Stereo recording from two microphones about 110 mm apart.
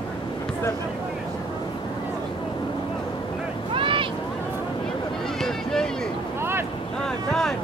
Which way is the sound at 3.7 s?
50° right (ahead or behind).